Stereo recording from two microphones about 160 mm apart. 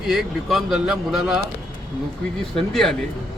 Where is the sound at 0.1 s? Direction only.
Centre (ahead or behind).